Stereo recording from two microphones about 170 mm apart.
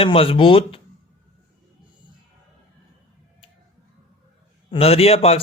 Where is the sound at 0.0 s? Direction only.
35° left (ahead or behind).